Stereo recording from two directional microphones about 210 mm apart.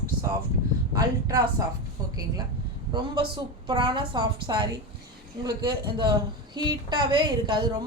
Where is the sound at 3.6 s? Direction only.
25° right (ahead or behind).